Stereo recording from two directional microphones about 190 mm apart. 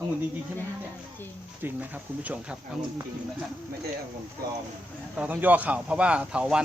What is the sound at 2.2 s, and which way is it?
Speech, 5° right (ahead or behind).